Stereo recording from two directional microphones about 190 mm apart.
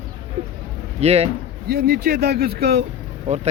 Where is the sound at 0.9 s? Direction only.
35° right (ahead or behind).